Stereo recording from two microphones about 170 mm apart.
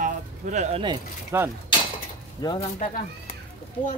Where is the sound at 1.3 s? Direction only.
15° right (ahead or behind).